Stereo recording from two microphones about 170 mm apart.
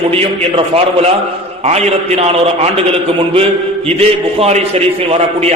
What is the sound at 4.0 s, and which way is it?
A man's voice, 35° right (ahead or behind).